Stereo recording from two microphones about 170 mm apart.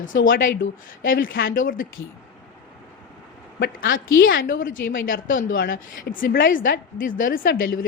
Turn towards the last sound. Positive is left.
turn(degrees=60)  # may be behind; listen again after turning